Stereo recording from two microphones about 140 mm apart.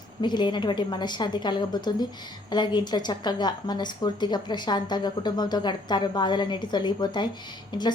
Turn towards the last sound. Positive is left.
turn(degrees=30)  # may be behind; listen again after turning